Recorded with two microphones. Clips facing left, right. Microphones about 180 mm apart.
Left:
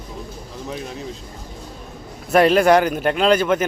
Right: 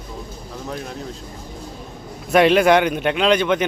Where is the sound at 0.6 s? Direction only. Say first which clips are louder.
Even; centre (ahead or behind).